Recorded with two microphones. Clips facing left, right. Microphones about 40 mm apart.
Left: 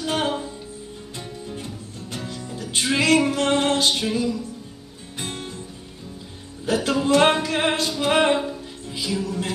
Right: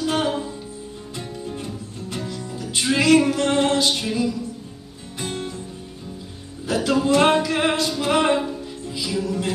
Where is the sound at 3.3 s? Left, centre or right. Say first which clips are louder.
Right 1 dB; left.